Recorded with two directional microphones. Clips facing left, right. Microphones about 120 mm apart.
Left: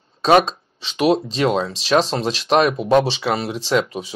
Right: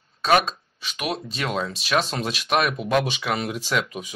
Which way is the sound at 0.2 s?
30° left (ahead or behind).